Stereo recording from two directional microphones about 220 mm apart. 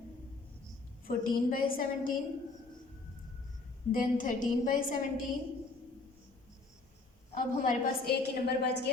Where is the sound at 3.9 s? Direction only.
35° left (ahead or behind).